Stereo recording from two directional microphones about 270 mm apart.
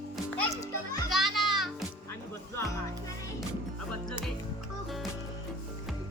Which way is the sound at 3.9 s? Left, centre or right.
Centre.